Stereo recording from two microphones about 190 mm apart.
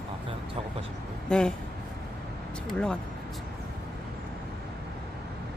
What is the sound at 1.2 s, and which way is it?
Speech, 5° left (ahead or behind).